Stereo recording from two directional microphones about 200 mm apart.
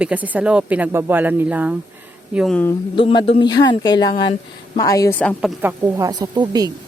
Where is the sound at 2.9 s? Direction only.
25° left (ahead or behind).